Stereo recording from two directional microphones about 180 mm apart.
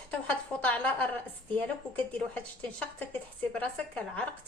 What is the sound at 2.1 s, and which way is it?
A woman's voice, 10° left (ahead or behind).